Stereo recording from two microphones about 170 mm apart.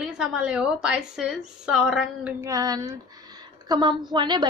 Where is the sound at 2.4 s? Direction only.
20° right (ahead or behind).